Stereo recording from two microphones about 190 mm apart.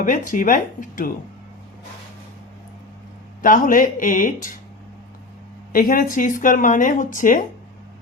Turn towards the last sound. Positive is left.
turn(degrees=45)  # may be behind; listen again after turning